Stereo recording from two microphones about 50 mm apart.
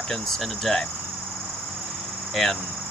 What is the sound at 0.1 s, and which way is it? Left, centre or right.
Speech, centre.